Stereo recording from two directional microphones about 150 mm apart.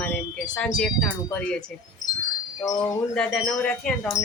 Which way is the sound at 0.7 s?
5° left (ahead or behind).